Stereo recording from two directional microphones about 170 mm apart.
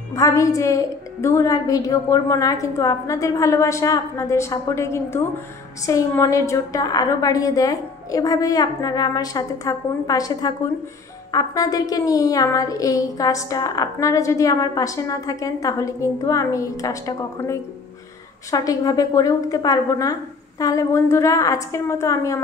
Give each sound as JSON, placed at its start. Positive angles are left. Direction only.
{"t": 0.1, "sound": "a woman's voice", "side_deg": 20}